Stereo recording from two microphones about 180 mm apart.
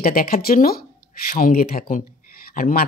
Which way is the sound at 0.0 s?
55° left (ahead or behind).